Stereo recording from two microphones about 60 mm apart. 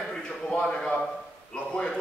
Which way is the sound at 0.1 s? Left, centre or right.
Centre.